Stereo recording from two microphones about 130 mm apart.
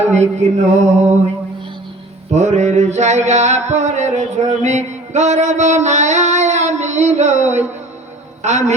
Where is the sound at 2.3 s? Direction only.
65° right (ahead or behind).